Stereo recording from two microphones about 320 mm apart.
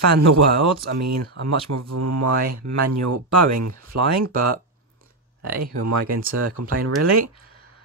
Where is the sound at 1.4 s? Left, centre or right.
Right.